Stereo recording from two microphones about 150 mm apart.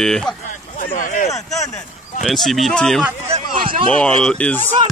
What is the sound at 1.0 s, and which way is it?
Speech, 60° left (ahead or behind).